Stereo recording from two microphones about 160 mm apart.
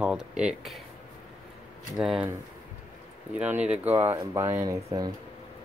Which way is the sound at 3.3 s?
10° right (ahead or behind).